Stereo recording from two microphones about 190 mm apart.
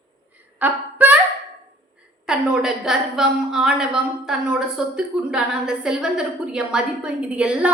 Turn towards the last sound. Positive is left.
turn(degrees=-5)  # may be behind; listen again after turning